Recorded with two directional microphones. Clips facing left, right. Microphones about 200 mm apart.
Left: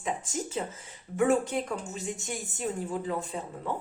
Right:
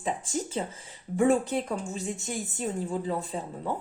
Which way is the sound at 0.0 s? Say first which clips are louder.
Right 2 dB; 30° right (ahead or behind).